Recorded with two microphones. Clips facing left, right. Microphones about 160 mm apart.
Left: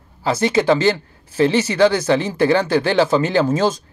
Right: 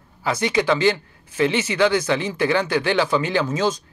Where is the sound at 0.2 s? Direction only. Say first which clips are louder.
Left 4 dB; 30° left (ahead or behind).